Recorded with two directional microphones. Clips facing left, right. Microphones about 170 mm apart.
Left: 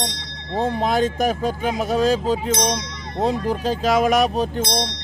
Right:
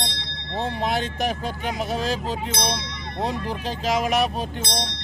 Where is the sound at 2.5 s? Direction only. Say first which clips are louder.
Left 5 dB; 45° left (ahead or behind).